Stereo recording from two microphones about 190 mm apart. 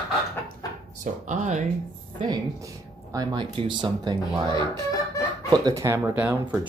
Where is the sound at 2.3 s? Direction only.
20° right (ahead or behind).